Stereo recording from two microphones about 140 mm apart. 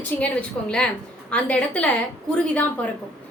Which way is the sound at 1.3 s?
10° left (ahead or behind).